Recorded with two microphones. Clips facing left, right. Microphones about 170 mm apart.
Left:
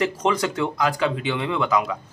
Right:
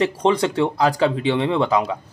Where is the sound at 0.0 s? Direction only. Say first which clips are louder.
Right 4 dB; 30° right (ahead or behind).